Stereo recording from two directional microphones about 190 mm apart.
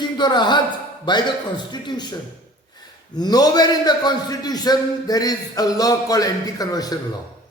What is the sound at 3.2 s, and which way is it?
A man's voice, 20° left (ahead or behind).